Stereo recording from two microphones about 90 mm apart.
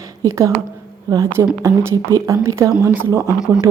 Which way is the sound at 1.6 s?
35° right (ahead or behind).